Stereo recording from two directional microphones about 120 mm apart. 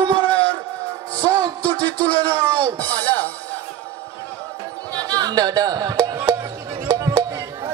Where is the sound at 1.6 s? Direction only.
15° left (ahead or behind).